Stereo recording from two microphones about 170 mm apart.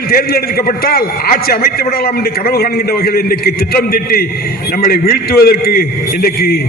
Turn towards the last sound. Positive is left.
turn(degrees=60)  # may be behind; listen again after turning